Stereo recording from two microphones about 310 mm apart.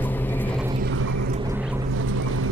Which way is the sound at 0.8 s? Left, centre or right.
Right.